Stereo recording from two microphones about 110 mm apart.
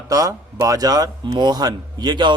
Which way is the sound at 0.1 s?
30° right (ahead or behind).